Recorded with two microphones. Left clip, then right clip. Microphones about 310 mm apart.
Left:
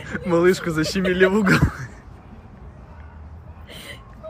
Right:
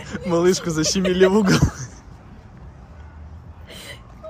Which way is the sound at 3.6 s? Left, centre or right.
Centre.